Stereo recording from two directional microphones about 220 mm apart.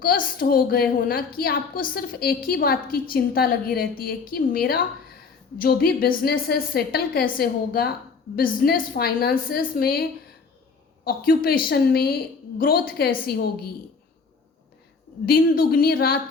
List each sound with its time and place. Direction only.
0.0 s a woman's voice: 40° left (ahead or behind)
15.3 s a woman's voice: 45° left (ahead or behind)